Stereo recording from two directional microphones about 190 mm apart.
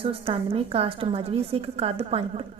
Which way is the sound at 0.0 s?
30° right (ahead or behind).